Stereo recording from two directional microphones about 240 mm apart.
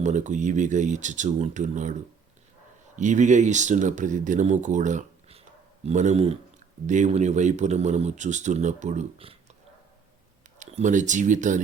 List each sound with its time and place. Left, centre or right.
0.0 s speech: right
10.6 s speech: right